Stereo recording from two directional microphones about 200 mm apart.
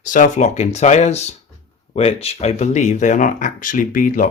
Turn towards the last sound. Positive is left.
turn(degrees=40)  # may be behind; listen again after turning